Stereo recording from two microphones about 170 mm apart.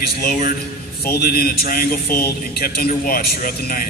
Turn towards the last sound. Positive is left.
turn(degrees=60)  # may be behind; listen again after turning